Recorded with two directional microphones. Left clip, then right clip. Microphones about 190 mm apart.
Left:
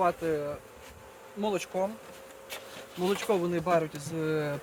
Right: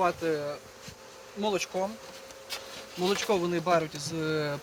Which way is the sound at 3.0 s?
5° right (ahead or behind).